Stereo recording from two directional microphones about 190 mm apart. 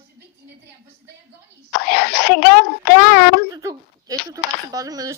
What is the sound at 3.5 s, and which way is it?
Speech, 20° right (ahead or behind).